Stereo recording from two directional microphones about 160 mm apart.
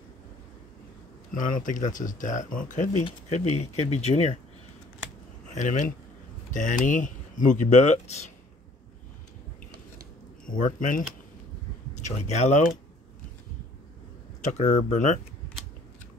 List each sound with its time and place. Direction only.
1.3 s speech: 55° left (ahead or behind)
5.5 s speech: 50° left (ahead or behind)
10.4 s speech: 60° left (ahead or behind)
12.0 s speech: 45° left (ahead or behind)
14.4 s speech: 50° left (ahead or behind)